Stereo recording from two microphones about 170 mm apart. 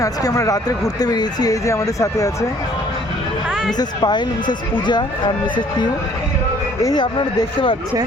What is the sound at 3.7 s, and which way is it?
Speech, 25° left (ahead or behind).